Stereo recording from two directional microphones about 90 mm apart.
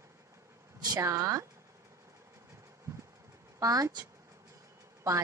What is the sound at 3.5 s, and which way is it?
Speech, 40° right (ahead or behind).